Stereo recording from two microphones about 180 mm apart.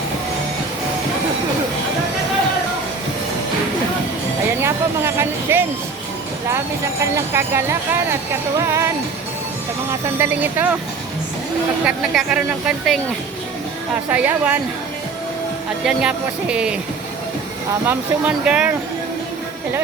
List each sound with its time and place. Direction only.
4.6 s speech: 15° right (ahead or behind)
7.0 s speech: 15° right (ahead or behind)
9.9 s speech: 10° right (ahead or behind)
11.9 s a woman's voice: 5° right (ahead or behind)
14.1 s speech: 10° right (ahead or behind)
15.8 s a woman's voice: 5° right (ahead or behind)
17.8 s a woman's voice: 5° right (ahead or behind)